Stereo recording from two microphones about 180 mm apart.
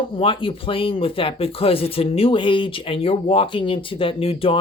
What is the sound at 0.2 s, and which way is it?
Speech, 30° left (ahead or behind).